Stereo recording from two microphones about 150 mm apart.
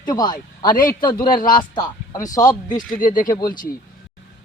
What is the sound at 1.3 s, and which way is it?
Speech, 70° left (ahead or behind).